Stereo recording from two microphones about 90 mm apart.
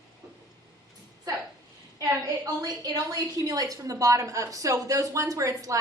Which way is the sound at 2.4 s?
45° right (ahead or behind).